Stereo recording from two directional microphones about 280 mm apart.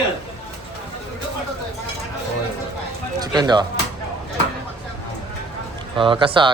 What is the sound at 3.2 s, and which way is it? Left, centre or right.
Speech, centre.